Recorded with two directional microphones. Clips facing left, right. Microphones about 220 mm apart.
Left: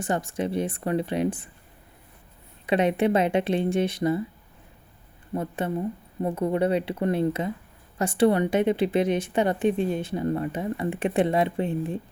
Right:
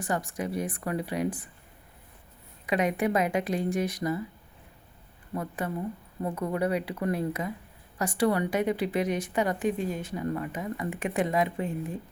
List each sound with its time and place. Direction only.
0.0 s a woman's voice: 25° left (ahead or behind)
2.6 s a woman's voice: 25° left (ahead or behind)
5.3 s a woman's voice: 25° left (ahead or behind)